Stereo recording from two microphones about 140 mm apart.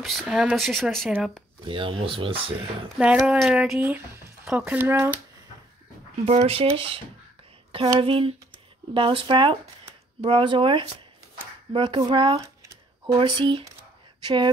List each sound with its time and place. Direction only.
0.0 s speech: centre (ahead or behind)
1.6 s speech: 35° right (ahead or behind)
3.0 s speech: 10° right (ahead or behind)
3.7 s speech: 15° right (ahead or behind)
6.2 s speech: 45° right (ahead or behind)